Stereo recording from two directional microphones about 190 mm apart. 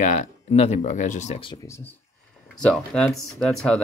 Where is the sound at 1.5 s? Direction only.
15° left (ahead or behind).